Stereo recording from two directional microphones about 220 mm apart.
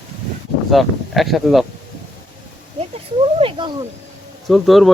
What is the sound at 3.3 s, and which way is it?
Speech, 25° right (ahead or behind).